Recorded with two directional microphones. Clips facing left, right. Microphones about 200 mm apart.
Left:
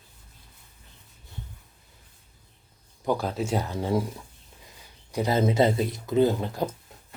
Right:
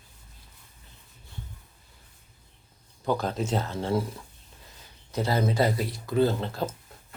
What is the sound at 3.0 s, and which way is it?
Speech, 10° left (ahead or behind).